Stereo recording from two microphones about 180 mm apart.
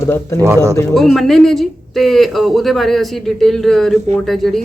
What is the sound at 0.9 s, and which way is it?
Speech, centre (ahead or behind).